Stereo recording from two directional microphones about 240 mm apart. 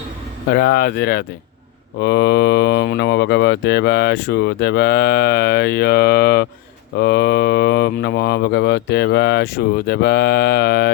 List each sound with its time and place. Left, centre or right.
0.5 s speech: left